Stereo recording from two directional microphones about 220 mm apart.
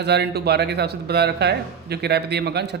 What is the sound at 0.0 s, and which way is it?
Speech, 50° right (ahead or behind).